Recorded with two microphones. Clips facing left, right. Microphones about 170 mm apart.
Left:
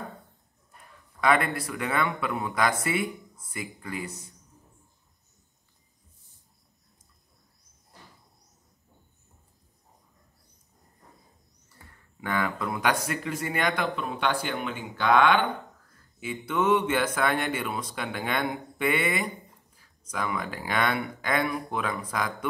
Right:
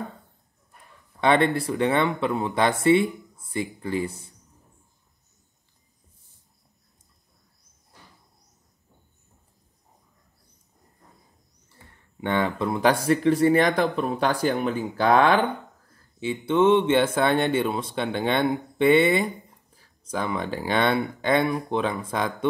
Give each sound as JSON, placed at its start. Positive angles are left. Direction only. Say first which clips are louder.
{"t": 1.2, "sound": "speech", "louder": "right 4 dB", "side_deg": -30}
{"t": 12.2, "sound": "speech", "louder": "right 5 dB", "side_deg": -25}
{"t": 16.2, "sound": "speech", "louder": "right 7 dB", "side_deg": -30}